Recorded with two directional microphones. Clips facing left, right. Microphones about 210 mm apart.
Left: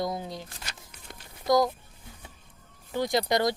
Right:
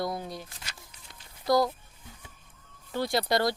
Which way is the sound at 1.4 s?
20° left (ahead or behind).